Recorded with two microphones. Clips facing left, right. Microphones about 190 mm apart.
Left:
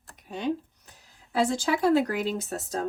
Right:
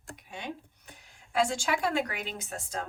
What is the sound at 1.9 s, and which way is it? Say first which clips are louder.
Speech: left 8 dB; 40° left (ahead or behind).